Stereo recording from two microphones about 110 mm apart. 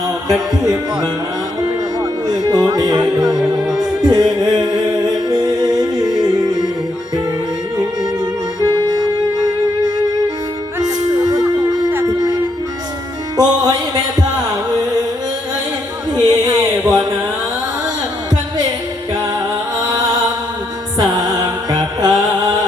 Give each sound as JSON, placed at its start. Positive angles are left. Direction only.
{"t": 2.2, "sound": "music", "side_deg": -35}
{"t": 7.8, "sound": "music", "side_deg": -35}
{"t": 13.3, "sound": "music", "side_deg": -35}
{"t": 16.1, "sound": "music", "side_deg": -35}
{"t": 19.9, "sound": "chant", "side_deg": -35}
{"t": 21.0, "sound": "music", "side_deg": -35}